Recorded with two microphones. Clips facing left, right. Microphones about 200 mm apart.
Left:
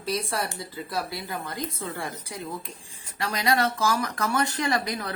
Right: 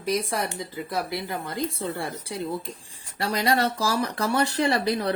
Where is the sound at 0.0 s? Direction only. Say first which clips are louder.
Right 3 dB; 20° right (ahead or behind).